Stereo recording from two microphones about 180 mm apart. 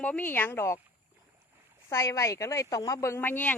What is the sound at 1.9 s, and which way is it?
Speech, 20° left (ahead or behind).